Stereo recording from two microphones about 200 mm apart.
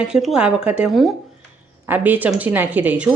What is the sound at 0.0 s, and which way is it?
A woman's voice, 5° right (ahead or behind).